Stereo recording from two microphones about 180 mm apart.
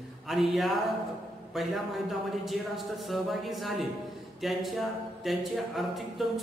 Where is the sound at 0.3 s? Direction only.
Centre (ahead or behind).